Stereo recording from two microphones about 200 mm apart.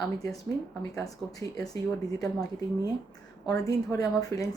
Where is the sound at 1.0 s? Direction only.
15° left (ahead or behind).